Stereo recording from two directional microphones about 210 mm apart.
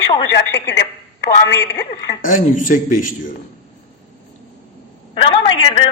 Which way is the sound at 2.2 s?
40° left (ahead or behind).